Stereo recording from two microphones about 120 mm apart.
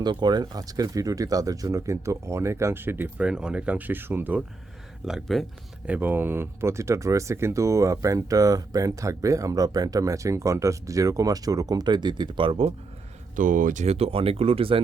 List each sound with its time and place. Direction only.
0.0 s speech: 35° right (ahead or behind); by 4.4 s 15° right (ahead or behind)
5.0 s speech: centre (ahead or behind)
5.8 s speech: 15° right (ahead or behind); by 12.7 s 45° right (ahead or behind)
13.3 s speech: 90° right; by 14.8 s 50° right (ahead or behind)